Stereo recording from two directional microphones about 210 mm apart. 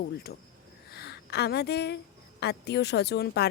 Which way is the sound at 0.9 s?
50° left (ahead or behind).